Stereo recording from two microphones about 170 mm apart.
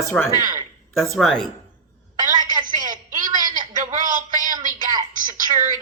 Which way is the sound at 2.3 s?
25° right (ahead or behind).